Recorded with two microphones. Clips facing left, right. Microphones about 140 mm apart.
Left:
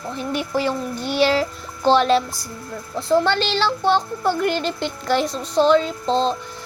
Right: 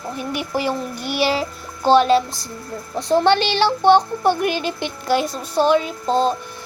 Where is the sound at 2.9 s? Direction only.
20° right (ahead or behind).